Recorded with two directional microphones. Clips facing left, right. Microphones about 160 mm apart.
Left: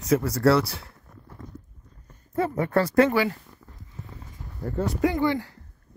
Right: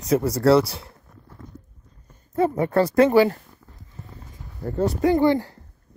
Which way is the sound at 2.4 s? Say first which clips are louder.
Right 4 dB; 20° right (ahead or behind).